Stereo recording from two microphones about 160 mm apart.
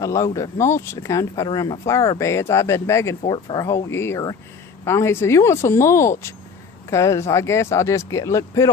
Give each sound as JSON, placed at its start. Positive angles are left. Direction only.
{"t": 0.0, "sound": "speech", "side_deg": 20}